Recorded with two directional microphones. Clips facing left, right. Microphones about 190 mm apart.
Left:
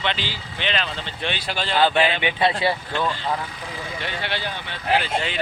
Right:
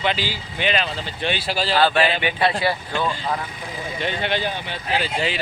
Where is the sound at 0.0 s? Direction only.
5° right (ahead or behind).